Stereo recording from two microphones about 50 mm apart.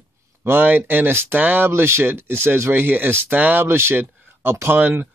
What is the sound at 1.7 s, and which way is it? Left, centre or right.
Speech, right.